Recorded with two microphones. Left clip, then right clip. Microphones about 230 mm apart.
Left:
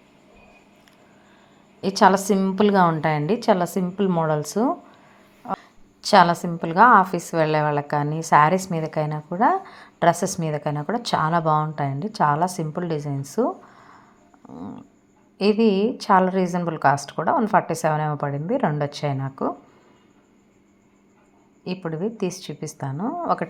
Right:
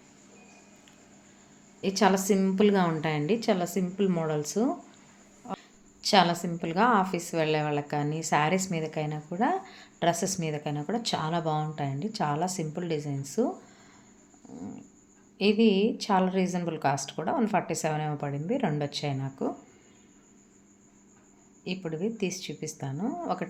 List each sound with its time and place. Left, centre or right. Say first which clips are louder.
1.8 s a woman's voice: left 8 dB; centre
15.4 s a woman's voice: left 5 dB; centre
21.6 s a woman's voice: left 5 dB; centre